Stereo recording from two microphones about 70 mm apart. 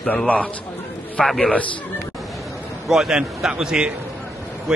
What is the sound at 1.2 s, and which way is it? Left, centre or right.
Speech, centre.